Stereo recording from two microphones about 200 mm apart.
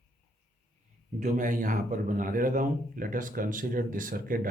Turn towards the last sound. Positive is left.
turn(degrees=-45)  # may be behind; listen again after turning